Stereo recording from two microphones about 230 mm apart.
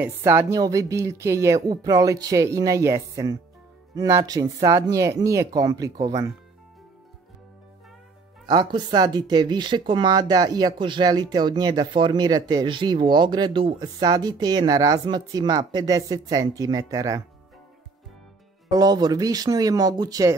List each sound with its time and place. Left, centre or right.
0.0 s speech: centre
8.5 s speech: centre
18.7 s speech: centre